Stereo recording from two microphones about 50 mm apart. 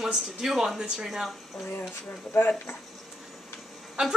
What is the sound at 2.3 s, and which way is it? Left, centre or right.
Speech, left.